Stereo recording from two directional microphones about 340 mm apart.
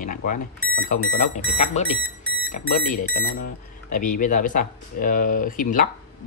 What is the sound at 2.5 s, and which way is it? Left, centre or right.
Speech, left.